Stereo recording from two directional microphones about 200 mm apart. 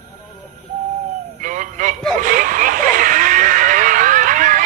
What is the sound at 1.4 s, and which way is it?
Music, 40° right (ahead or behind).